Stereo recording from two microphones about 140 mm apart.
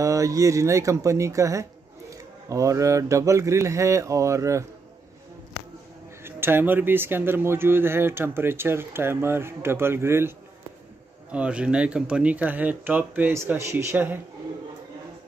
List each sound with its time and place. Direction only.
0.0 s speech: 25° right (ahead or behind)
6.2 s speech: 15° right (ahead or behind)
11.3 s speech: 10° right (ahead or behind)